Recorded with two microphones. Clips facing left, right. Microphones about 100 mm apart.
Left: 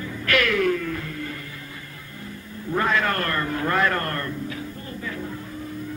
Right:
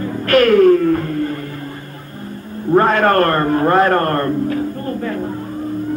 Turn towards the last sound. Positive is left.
turn(degrees=-50)  # may be behind; listen again after turning